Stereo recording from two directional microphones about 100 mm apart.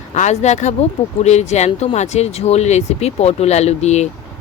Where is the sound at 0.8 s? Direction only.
90° left.